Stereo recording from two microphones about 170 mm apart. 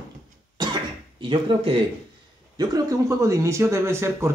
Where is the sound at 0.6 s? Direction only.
25° right (ahead or behind).